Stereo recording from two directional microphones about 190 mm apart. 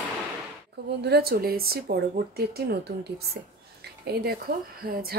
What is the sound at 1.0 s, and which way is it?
Speech, 60° right (ahead or behind).